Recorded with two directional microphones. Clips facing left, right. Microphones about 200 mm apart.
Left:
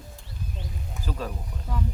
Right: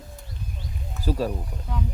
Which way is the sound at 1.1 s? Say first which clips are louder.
Right 8 dB; 35° right (ahead or behind).